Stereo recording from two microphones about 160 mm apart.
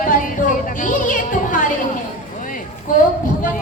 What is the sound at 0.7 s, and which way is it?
Music, 55° left (ahead or behind).